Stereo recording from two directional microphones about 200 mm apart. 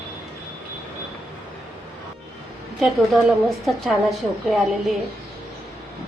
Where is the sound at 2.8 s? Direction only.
Centre (ahead or behind).